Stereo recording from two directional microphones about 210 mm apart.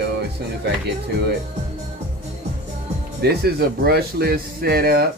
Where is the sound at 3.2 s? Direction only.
50° right (ahead or behind).